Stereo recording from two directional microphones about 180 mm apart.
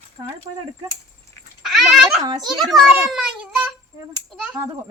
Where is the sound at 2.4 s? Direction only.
Centre (ahead or behind).